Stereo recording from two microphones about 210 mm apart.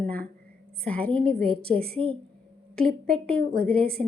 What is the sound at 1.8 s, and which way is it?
Speech, 25° right (ahead or behind).